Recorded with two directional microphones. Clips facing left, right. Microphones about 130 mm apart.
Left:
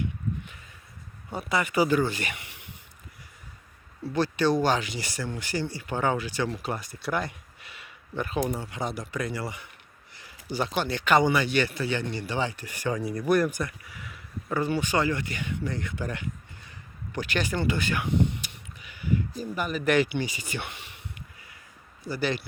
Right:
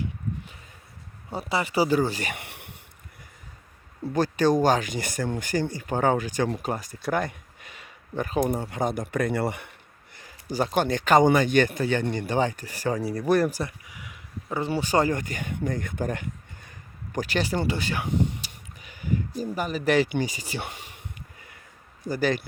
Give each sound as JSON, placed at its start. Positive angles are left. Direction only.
{"t": 1.3, "sound": "speech", "side_deg": -30}
{"t": 2.3, "sound": "a sound", "side_deg": -60}
{"t": 4.1, "sound": "speech", "side_deg": -45}
{"t": 10.2, "sound": "speech", "side_deg": -40}
{"t": 13.8, "sound": "a sound", "side_deg": -15}
{"t": 14.7, "sound": "speech", "side_deg": -35}
{"t": 22.0, "sound": "speech", "side_deg": -45}